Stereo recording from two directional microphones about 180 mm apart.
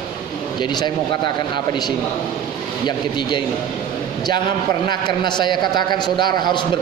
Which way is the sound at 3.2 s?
25° left (ahead or behind).